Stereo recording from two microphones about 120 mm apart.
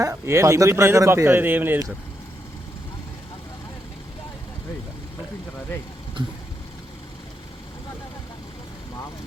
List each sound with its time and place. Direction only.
0.0 s speech: 25° right (ahead or behind)